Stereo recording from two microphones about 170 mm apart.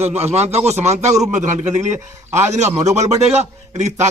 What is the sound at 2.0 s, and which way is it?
Speech, 15° right (ahead or behind).